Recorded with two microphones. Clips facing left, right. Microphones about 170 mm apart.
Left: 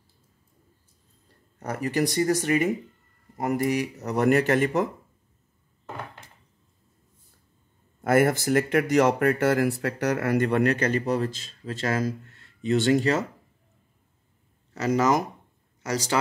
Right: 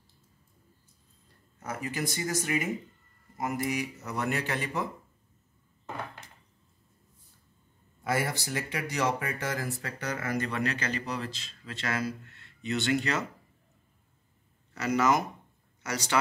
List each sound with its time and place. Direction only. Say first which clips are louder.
1.6 s speech: left 8 dB; 40° left (ahead or behind)
8.0 s speech: left 10 dB; 50° left (ahead or behind)
14.8 s speech: left 4 dB; 40° left (ahead or behind)